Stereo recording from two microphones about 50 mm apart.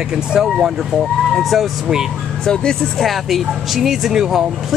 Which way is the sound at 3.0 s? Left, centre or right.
Centre.